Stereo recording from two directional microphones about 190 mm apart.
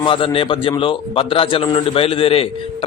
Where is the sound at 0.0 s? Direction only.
25° left (ahead or behind).